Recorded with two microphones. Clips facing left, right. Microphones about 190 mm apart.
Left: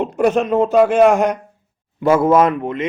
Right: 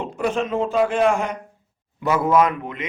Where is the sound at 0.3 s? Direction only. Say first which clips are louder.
Left 6 dB; 65° left (ahead or behind).